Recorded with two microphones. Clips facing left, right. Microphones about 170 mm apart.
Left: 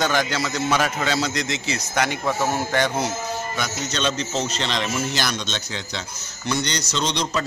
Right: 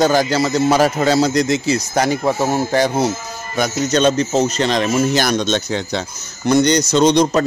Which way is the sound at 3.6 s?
45° right (ahead or behind).